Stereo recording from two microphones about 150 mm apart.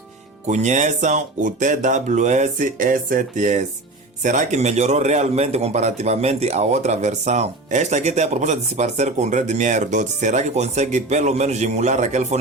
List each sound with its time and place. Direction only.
0.4 s a man's voice: 50° right (ahead or behind)